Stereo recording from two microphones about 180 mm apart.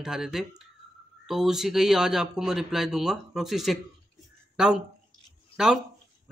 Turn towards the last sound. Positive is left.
turn(degrees=-5)  # may be behind; listen again after turning